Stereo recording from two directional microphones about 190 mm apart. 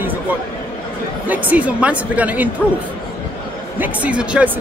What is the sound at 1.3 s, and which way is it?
A man's voice, 10° right (ahead or behind).